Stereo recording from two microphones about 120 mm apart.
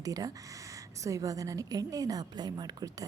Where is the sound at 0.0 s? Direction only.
30° right (ahead or behind).